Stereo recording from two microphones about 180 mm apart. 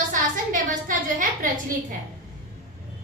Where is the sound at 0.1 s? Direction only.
45° right (ahead or behind).